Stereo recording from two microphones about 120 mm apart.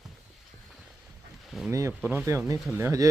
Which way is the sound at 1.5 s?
5° right (ahead or behind).